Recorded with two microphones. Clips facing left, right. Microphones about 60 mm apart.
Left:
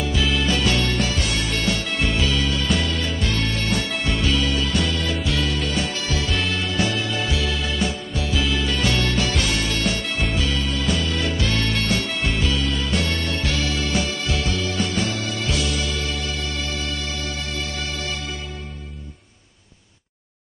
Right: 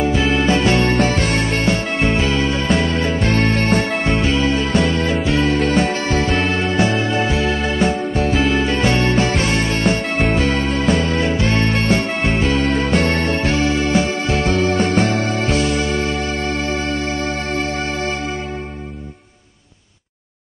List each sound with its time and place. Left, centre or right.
0.0 s music: right